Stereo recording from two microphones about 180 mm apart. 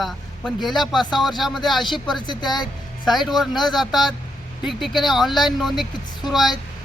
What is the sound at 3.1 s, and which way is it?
Speech, centre (ahead or behind).